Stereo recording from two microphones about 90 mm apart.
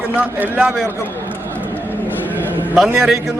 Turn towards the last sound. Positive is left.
turn(degrees=0)  # may be behind; listen again after turning